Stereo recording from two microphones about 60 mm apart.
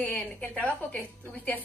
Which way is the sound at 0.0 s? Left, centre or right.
Left.